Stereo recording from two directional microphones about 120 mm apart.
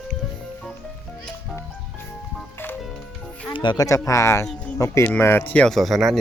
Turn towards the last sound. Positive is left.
turn(degrees=0)  # may be behind; listen again after turning